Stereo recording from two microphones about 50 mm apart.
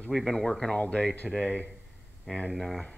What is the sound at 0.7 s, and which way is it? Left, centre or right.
Speech, left.